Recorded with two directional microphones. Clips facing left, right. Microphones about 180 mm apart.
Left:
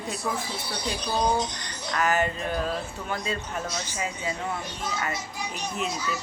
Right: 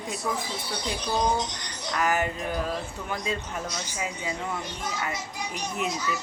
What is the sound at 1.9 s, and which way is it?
Speech, 15° right (ahead or behind).